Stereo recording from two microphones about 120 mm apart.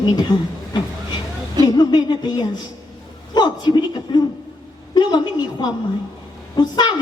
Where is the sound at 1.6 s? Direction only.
35° left (ahead or behind).